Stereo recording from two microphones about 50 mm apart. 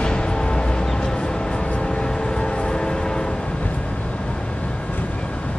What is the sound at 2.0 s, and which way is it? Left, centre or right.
Music, centre.